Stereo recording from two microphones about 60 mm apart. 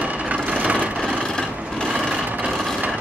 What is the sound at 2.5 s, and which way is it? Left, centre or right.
Vehicle, centre.